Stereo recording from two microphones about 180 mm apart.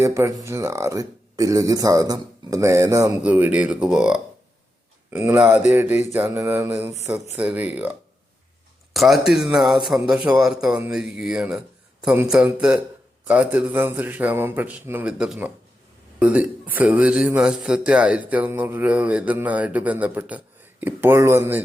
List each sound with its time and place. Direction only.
0.0 s speech: 15° right (ahead or behind)